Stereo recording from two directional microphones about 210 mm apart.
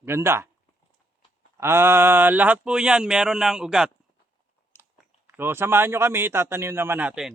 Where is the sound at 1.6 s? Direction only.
10° right (ahead or behind).